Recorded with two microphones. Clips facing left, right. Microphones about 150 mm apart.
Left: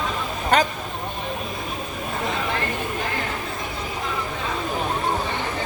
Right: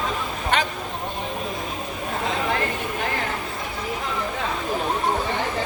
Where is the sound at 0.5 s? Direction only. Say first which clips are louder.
Left 4 dB; 40° left (ahead or behind).